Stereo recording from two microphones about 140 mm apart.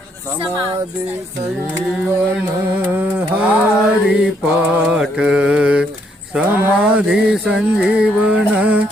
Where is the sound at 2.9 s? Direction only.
10° right (ahead or behind).